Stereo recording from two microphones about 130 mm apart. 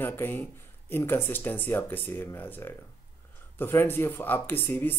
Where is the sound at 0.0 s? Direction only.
15° left (ahead or behind).